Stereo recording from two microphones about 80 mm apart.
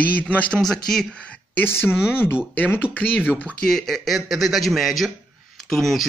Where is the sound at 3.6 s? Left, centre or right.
Centre.